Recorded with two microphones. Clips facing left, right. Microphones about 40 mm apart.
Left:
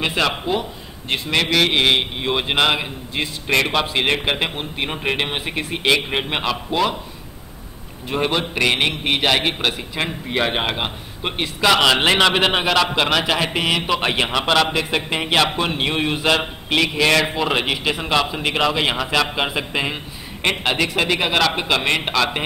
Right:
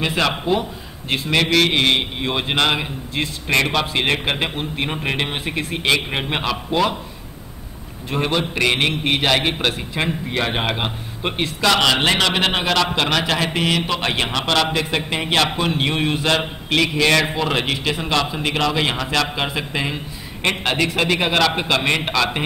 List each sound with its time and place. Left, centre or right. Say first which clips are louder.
0.0 s a man's voice: even; centre
8.1 s a man's voice: even; centre